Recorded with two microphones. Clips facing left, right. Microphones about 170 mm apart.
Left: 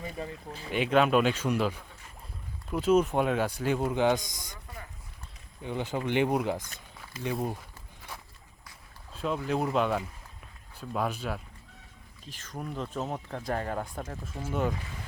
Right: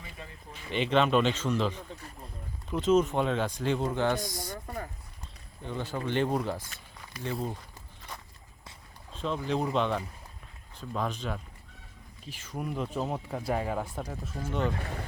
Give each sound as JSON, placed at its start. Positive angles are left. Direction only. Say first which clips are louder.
{"t": 0.0, "sound": "speech", "louder": "left 9 dB", "side_deg": 35}
{"t": 0.7, "sound": "speech", "louder": "left 1 dB", "side_deg": 5}
{"t": 4.5, "sound": "a sound", "louder": "right 8 dB", "side_deg": -50}
{"t": 5.6, "sound": "speech", "louder": "left 2 dB", "side_deg": 15}
{"t": 9.1, "sound": "speech", "louder": "left 1 dB", "side_deg": 5}
{"t": 12.2, "sound": "speech", "louder": "right 2 dB", "side_deg": -10}
{"t": 14.4, "sound": "speech", "louder": "left 1 dB", "side_deg": 5}
{"t": 14.8, "sound": "speech", "louder": "right 6 dB", "side_deg": -60}